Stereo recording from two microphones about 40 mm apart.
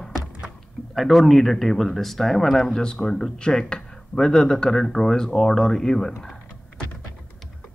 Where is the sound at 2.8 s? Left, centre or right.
Centre.